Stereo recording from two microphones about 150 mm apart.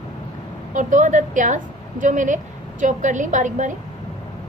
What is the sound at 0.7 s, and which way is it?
A woman's voice, 55° right (ahead or behind).